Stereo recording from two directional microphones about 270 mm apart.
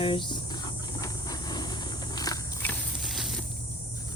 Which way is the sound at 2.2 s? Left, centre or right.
Centre.